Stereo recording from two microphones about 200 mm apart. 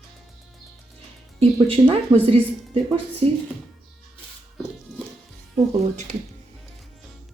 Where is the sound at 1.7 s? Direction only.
25° right (ahead or behind).